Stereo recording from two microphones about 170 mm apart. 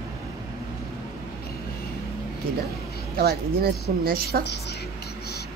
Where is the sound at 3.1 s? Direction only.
65° right (ahead or behind).